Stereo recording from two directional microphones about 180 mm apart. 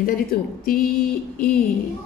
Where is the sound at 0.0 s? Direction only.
55° left (ahead or behind).